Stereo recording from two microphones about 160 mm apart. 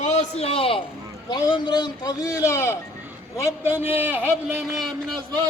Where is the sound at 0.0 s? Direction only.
45° left (ahead or behind); by 2.7 s 15° left (ahead or behind).